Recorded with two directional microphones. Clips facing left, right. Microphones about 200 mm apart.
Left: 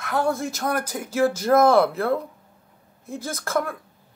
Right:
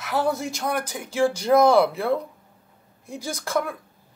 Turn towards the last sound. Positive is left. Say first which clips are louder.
# left 1 dB
turn(degrees=0)  # may be behind; listen again after turning